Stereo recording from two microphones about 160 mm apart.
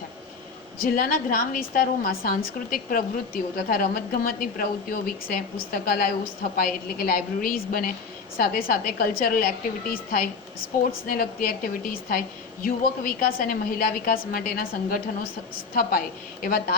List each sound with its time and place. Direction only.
0.8 s a woman's voice: 65° left (ahead or behind)